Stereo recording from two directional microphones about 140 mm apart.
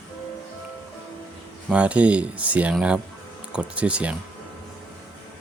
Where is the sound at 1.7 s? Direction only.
10° right (ahead or behind).